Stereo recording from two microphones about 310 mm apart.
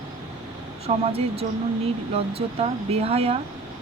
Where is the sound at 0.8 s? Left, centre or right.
Centre.